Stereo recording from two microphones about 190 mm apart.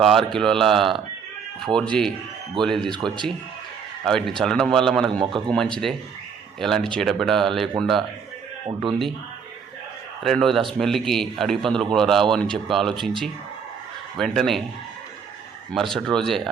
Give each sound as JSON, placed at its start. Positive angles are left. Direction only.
{"t": 0.0, "sound": "a man's voice", "side_deg": 0}
{"t": 4.0, "sound": "a man's voice", "side_deg": 5}
{"t": 8.6, "sound": "speech", "side_deg": -25}
{"t": 10.2, "sound": "a man's voice", "side_deg": 0}
{"t": 15.7, "sound": "a man's voice", "side_deg": 0}